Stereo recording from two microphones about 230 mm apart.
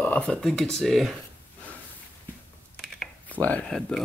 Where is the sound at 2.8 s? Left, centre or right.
Centre.